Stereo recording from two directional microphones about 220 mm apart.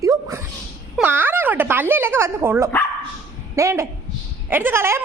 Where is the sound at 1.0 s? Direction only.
10° right (ahead or behind).